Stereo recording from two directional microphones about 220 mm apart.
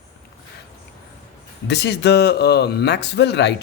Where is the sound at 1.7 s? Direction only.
50° left (ahead or behind).